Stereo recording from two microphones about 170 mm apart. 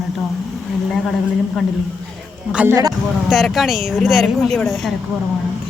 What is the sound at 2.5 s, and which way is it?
Speech, 15° right (ahead or behind).